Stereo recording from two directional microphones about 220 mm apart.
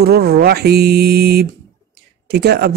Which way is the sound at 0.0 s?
45° right (ahead or behind).